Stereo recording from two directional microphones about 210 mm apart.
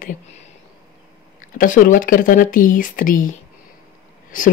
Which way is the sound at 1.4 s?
40° left (ahead or behind).